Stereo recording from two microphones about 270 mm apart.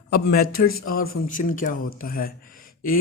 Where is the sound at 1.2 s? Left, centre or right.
Left.